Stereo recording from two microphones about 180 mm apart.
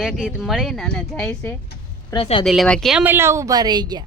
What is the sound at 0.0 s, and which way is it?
Speech, centre (ahead or behind).